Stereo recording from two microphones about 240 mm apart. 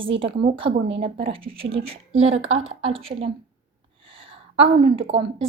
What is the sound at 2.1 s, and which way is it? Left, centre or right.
Speech, right.